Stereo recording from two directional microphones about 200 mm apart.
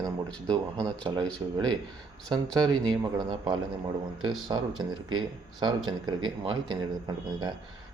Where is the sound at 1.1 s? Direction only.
20° right (ahead or behind).